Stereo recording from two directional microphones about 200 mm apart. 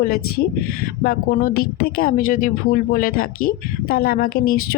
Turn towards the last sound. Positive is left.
turn(degrees=45)  # may be behind; listen again after turning